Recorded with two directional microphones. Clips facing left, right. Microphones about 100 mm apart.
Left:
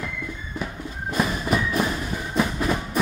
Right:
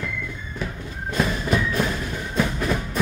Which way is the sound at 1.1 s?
5° left (ahead or behind).